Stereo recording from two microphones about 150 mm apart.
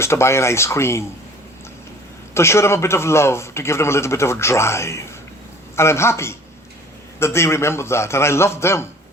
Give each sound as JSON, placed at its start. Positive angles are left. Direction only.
{"t": 0.0, "sound": "a man's voice", "side_deg": 20}
{"t": 2.3, "sound": "a man's voice", "side_deg": 20}